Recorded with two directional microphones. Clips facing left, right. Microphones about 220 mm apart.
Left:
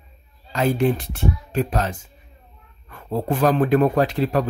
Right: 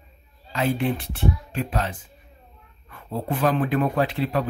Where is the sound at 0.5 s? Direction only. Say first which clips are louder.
Left 4 dB; 45° left (ahead or behind).